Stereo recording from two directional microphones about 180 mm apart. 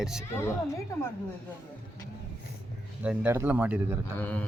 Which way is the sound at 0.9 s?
15° left (ahead or behind).